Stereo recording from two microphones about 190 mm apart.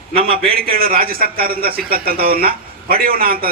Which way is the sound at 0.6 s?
50° right (ahead or behind).